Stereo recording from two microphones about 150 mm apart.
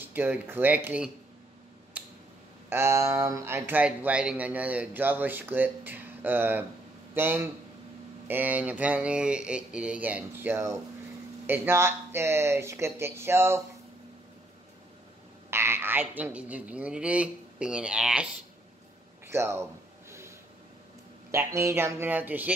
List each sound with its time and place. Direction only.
0.0 s speech: 15° right (ahead or behind)
2.0 s a sound: 10° right (ahead or behind)
2.7 s speech: 15° right (ahead or behind)
15.5 s speech: 15° right (ahead or behind)
19.3 s speech: 15° right (ahead or behind)
20.1 s train: 20° right (ahead or behind)
21.3 s speech: 20° right (ahead or behind)